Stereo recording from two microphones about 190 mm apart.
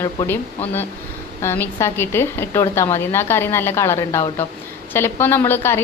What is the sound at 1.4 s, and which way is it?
A woman's voice, 10° left (ahead or behind).